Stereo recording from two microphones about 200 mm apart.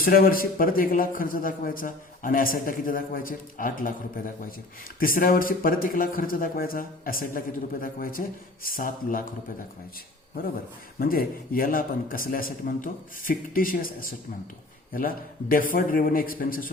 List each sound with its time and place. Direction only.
0.0 s a man's voice: 45° left (ahead or behind)
11.0 s a man's voice: 45° left (ahead or behind)